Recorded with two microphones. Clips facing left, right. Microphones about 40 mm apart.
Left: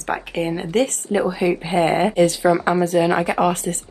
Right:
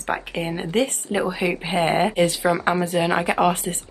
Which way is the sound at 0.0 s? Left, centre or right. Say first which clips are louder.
Left 3 dB; centre.